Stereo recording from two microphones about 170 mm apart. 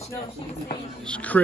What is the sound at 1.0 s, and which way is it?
Speech, 10° left (ahead or behind).